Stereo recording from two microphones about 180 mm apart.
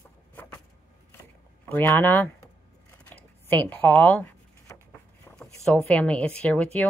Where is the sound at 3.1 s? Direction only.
10° left (ahead or behind).